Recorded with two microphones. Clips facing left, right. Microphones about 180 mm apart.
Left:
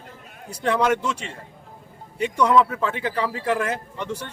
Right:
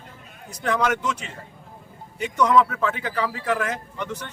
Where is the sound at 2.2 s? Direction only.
30° left (ahead or behind).